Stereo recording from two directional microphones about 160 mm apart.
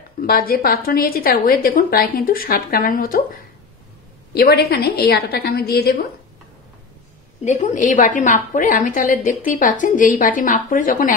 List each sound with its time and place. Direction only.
0.3 s a woman's voice: 65° left (ahead or behind)
4.3 s a woman's voice: 80° left
7.4 s a woman's voice: 50° left (ahead or behind)